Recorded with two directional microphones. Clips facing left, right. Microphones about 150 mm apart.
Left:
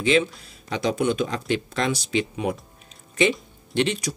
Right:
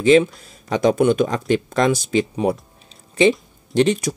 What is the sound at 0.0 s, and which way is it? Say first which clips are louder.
Speech: right 7 dB; 45° right (ahead or behind).